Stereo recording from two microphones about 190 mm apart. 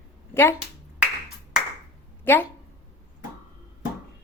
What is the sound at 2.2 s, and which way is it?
Speech, 10° left (ahead or behind).